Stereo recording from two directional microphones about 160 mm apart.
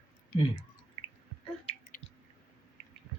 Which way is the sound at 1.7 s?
40° left (ahead or behind).